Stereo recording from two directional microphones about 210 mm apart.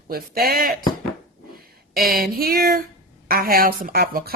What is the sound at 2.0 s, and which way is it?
Speech, 45° right (ahead or behind).